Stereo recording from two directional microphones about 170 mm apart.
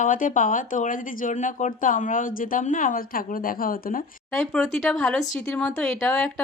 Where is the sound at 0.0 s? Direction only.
50° left (ahead or behind).